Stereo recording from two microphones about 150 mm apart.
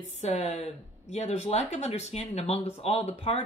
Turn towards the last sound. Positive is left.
turn(degrees=40)  # may be behind; listen again after turning